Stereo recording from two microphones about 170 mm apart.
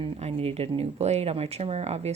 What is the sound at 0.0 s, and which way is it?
Speech, 35° right (ahead or behind).